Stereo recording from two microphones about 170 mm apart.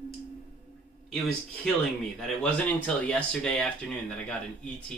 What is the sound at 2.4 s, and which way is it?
Speech, 10° left (ahead or behind).